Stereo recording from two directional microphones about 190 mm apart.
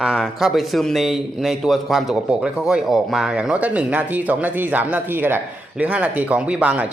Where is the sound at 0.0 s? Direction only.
Centre (ahead or behind).